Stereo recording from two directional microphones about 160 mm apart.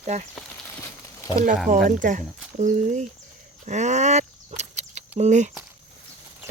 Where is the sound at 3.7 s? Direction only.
45° right (ahead or behind).